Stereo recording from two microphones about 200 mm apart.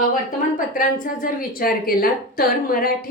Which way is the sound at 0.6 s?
45° left (ahead or behind).